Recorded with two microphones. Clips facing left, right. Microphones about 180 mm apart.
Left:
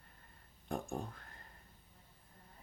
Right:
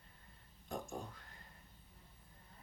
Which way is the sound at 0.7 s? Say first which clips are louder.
Left 4 dB; 55° left (ahead or behind).